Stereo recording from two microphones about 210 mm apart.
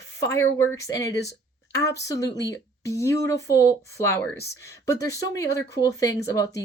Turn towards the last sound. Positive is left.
turn(degrees=15)  # may be behind; listen again after turning